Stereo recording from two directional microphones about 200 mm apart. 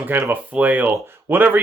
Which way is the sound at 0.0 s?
10° right (ahead or behind).